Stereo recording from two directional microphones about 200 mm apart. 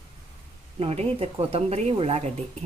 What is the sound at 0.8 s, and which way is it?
A woman's voice, 30° right (ahead or behind).